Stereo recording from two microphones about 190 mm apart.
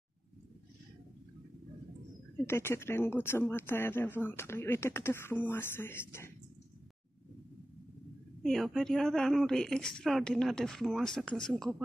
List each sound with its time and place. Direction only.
2.4 s speech: 15° left (ahead or behind)
8.4 s a woman's voice: centre (ahead or behind)